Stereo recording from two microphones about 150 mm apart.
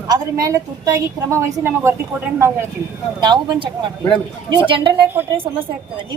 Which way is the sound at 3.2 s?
30° right (ahead or behind).